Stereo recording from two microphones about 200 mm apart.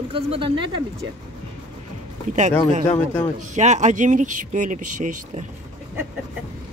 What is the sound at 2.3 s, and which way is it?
Speech, 40° right (ahead or behind).